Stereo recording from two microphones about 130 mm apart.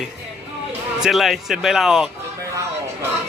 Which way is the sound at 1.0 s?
Centre (ahead or behind).